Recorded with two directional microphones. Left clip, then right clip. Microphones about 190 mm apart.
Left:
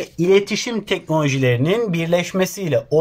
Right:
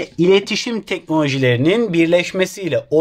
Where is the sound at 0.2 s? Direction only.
45° right (ahead or behind).